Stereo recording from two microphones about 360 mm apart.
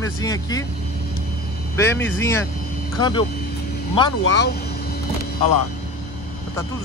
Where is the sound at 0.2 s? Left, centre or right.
Centre.